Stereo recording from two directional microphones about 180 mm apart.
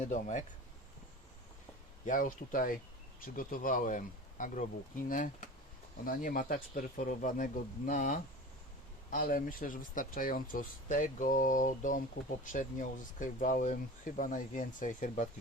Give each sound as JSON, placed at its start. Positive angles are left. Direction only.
{"t": 0.1, "sound": "speech", "side_deg": 45}
{"t": 2.0, "sound": "speech", "side_deg": 50}